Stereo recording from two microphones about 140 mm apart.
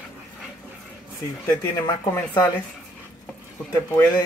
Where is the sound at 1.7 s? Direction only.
30° left (ahead or behind).